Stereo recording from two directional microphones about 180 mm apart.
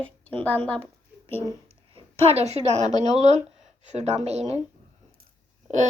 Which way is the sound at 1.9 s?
35° right (ahead or behind).